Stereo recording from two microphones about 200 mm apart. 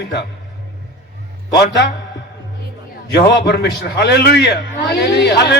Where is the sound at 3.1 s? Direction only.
55° left (ahead or behind).